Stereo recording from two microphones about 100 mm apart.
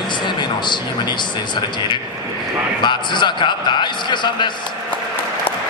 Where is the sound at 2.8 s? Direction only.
50° left (ahead or behind).